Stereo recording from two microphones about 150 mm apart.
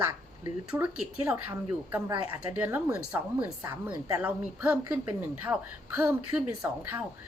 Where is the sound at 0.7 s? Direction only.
5° right (ahead or behind).